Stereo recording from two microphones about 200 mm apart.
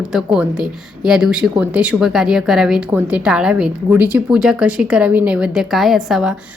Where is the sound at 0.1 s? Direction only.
5° right (ahead or behind).